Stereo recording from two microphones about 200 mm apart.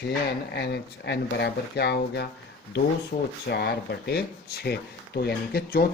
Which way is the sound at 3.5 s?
55° left (ahead or behind).